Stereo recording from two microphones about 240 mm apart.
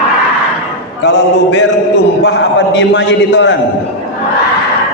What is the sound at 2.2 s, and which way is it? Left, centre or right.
A man's voice, left.